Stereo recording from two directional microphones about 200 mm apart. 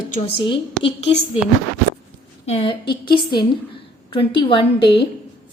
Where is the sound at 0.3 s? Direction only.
25° left (ahead or behind).